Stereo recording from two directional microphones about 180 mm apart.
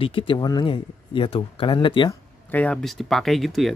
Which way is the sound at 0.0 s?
30° left (ahead or behind).